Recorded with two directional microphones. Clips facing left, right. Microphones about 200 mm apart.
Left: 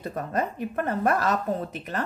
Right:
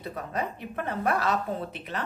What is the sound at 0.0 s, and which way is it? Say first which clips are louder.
A woman's voice: left 4 dB; 45° left (ahead or behind).